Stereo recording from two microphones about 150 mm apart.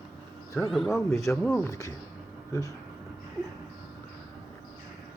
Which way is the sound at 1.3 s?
10° left (ahead or behind).